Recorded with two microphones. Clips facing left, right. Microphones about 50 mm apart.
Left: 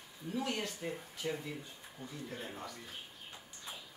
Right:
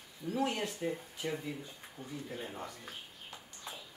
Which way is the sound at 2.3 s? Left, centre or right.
Centre.